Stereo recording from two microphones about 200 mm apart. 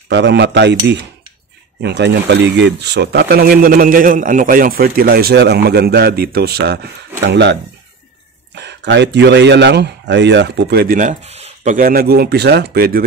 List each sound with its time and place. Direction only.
0.1 s speech: 60° right (ahead or behind)
8.5 s speech: 60° right (ahead or behind)